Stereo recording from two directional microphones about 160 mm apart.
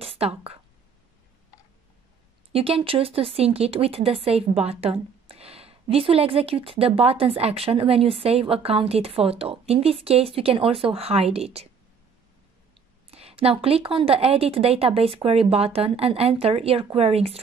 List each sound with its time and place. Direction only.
0.0 s a sound: 35° right (ahead or behind)
2.5 s a woman's voice: 35° right (ahead or behind)
13.1 s a woman's voice: 40° right (ahead or behind)